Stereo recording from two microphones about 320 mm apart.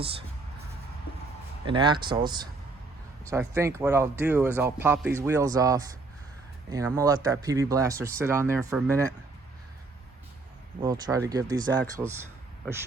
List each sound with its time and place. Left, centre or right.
0.0 s speech: centre
1.6 s speech: centre
10.8 s speech: centre